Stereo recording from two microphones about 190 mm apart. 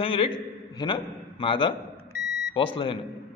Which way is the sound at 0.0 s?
30° left (ahead or behind).